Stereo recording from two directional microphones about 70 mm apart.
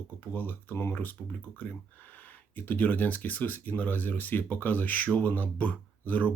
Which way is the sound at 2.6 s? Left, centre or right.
Left.